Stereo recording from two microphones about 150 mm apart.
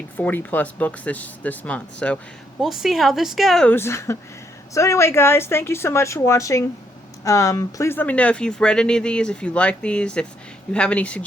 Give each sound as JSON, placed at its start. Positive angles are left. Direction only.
{"t": 0.2, "sound": "speech", "side_deg": 10}
{"t": 2.6, "sound": "a woman's voice", "side_deg": 0}
{"t": 3.8, "sound": "speech", "side_deg": 15}